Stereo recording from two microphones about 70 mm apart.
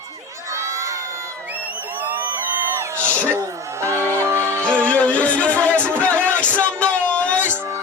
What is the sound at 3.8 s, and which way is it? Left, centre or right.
Music, right.